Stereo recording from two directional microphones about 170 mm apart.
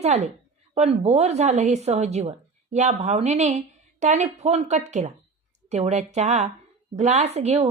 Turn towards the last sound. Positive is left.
turn(degrees=-40)  # may be behind; listen again after turning